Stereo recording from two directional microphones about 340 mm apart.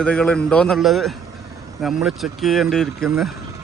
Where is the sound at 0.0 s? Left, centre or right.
Centre.